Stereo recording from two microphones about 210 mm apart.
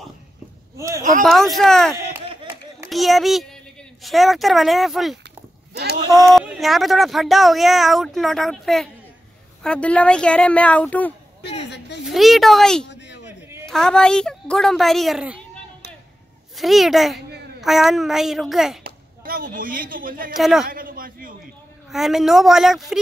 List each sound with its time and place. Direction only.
0.7 s speech: 15° right (ahead or behind)
1.2 s speech: centre (ahead or behind)
5.7 s a sound: 50° right (ahead or behind)
5.9 s speech: 20° right (ahead or behind)
6.2 s speech: 5° right (ahead or behind)
12.8 s a sound: 55° left (ahead or behind)
13.7 s speech: 5° left (ahead or behind)
16.5 s speech: centre (ahead or behind)
18.9 s speech: 45° right (ahead or behind)
20.3 s speech: centre (ahead or behind)
20.7 s a man's voice: 45° right (ahead or behind)
21.9 s speech: centre (ahead or behind)